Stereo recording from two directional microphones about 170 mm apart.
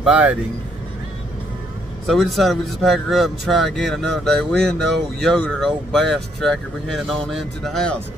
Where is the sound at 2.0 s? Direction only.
Centre (ahead or behind).